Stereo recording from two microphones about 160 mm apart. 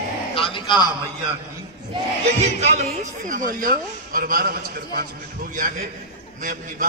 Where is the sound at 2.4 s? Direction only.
45° right (ahead or behind); by 5.0 s 65° right (ahead or behind).